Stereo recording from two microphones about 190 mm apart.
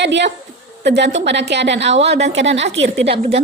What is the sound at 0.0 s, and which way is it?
A woman's voice, 65° right (ahead or behind).